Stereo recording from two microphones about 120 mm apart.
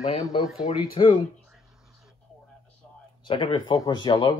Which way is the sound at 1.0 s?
50° left (ahead or behind).